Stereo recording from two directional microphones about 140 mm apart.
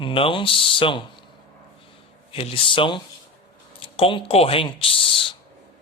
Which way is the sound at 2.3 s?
40° left (ahead or behind).